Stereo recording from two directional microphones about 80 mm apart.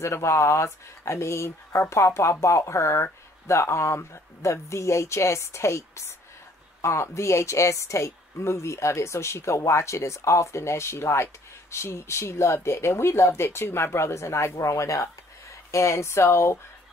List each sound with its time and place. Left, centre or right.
0.0 s speech: left